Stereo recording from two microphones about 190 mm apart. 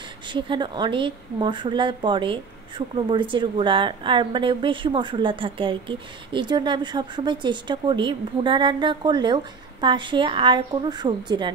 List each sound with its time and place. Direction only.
0.3 s a woman's voice: 25° right (ahead or behind)